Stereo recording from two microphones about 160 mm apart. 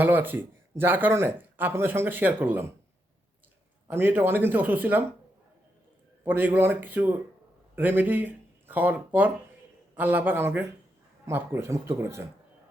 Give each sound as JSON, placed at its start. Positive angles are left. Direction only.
{"t": 0.0, "sound": "speech", "side_deg": -10}
{"t": 3.8, "sound": "speech", "side_deg": -15}
{"t": 6.2, "sound": "speech", "side_deg": -10}